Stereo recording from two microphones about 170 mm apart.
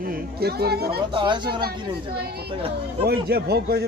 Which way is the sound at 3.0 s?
70° right (ahead or behind).